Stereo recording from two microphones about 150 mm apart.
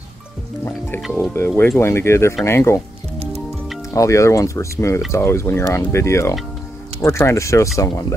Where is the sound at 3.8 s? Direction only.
20° left (ahead or behind).